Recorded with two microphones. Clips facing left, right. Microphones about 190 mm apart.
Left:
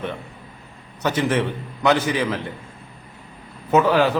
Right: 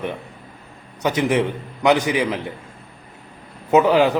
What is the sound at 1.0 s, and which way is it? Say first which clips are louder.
A man's voice: right 2 dB; 15° right (ahead or behind).